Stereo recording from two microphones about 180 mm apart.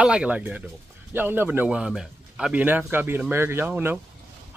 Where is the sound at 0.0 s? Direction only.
5° right (ahead or behind).